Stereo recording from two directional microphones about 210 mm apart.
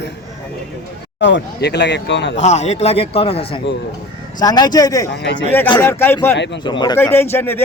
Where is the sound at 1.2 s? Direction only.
60° left (ahead or behind).